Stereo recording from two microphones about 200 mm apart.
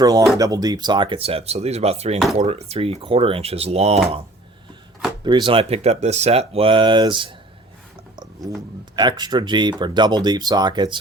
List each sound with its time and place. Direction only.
0.0 s speech: 20° right (ahead or behind)
5.2 s speech: 25° right (ahead or behind)
8.1 s a sound: 20° right (ahead or behind)
9.0 s speech: 20° right (ahead or behind)